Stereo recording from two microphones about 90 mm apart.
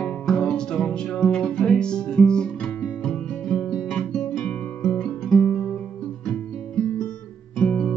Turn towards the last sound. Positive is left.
turn(degrees=15)  # may be behind; listen again after turning